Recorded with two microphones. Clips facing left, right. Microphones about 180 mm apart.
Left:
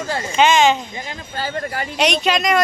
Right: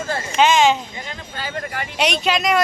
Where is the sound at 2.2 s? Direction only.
5° right (ahead or behind).